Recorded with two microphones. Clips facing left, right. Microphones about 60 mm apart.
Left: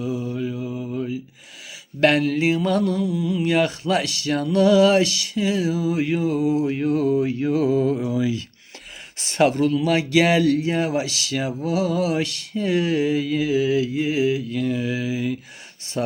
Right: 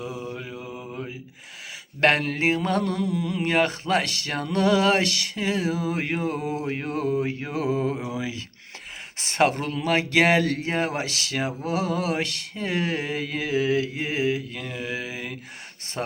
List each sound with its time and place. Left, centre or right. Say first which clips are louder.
0.0 s mantra: left 7 dB; right
0.9 s mantra: left 8 dB; right
16.0 s speech: left 5 dB; right